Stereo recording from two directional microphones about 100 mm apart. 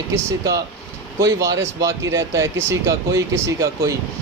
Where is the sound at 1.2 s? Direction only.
35° right (ahead or behind).